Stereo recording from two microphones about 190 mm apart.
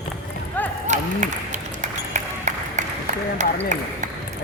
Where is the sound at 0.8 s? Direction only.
40° right (ahead or behind).